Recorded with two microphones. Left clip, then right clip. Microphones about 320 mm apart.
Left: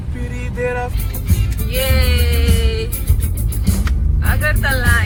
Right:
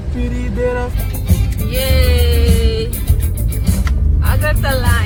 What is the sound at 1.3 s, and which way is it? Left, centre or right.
Music, centre.